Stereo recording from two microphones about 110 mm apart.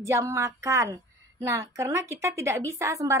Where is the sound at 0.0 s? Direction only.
25° right (ahead or behind).